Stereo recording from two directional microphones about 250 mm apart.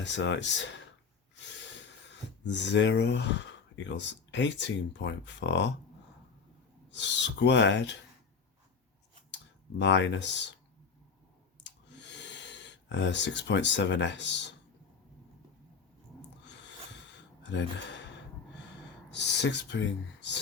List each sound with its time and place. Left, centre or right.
0.0 s speech: left
2.4 s speech: left
6.9 s speech: left
9.3 s speech: left
11.6 s a sound: left
17.5 s speech: left
19.1 s speech: left